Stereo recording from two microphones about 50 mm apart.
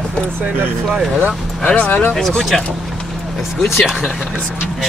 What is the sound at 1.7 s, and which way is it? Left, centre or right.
Speech, left.